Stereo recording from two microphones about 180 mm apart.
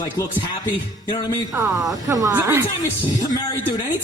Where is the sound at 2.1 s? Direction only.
20° right (ahead or behind).